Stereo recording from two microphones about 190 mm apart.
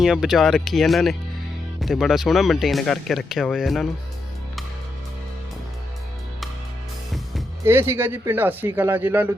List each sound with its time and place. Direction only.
0.0 s speech: centre (ahead or behind)
7.6 s speech: 15° right (ahead or behind)